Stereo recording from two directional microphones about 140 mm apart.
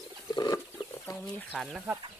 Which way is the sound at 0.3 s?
30° left (ahead or behind).